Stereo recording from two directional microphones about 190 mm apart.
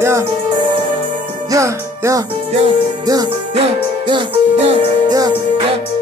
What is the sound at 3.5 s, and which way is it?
Music, 30° right (ahead or behind).